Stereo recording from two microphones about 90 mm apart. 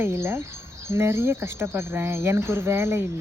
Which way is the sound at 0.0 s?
30° right (ahead or behind).